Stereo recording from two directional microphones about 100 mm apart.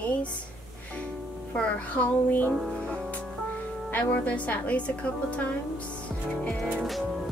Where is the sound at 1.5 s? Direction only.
15° left (ahead or behind).